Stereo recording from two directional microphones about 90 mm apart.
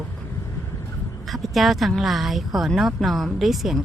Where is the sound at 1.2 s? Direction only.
Centre (ahead or behind).